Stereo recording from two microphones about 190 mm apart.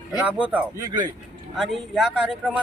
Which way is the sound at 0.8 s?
20° right (ahead or behind).